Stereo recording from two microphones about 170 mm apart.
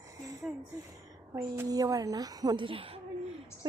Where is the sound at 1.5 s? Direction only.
20° right (ahead or behind).